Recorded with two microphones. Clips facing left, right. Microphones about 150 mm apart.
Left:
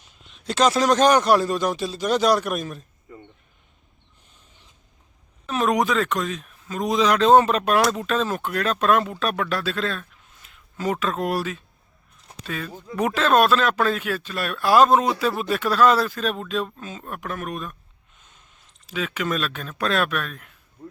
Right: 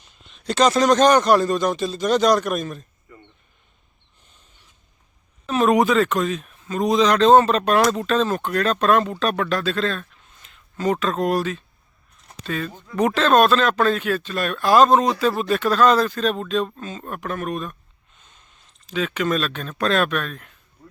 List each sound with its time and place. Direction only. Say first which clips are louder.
0.0 s a man's voice: right 3 dB; 5° left (ahead or behind)
5.5 s speech: right 4 dB; centre (ahead or behind)
18.9 s speech: right 4 dB; 5° left (ahead or behind)